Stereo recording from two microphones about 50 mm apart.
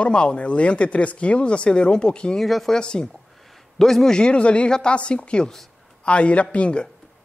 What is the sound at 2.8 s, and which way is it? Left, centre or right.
Speech, centre.